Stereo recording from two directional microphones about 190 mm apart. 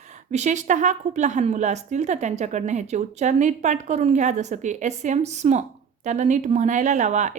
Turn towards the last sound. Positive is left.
turn(degrees=-40)  # may be behind; listen again after turning